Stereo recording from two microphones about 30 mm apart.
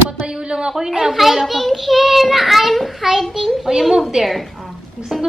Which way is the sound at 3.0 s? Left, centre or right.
Centre.